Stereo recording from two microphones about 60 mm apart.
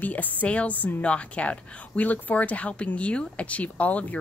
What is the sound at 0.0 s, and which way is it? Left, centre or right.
A woman's voice, left.